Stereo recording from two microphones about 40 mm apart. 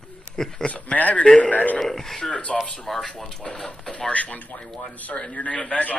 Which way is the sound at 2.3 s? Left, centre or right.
Left.